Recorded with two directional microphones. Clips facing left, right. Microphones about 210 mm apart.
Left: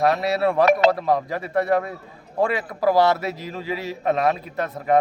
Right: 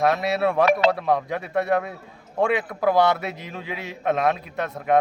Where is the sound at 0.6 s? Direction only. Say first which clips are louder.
Left 3 dB; 45° left (ahead or behind).